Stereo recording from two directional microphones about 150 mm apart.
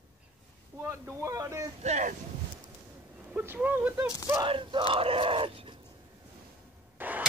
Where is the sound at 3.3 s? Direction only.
10° right (ahead or behind).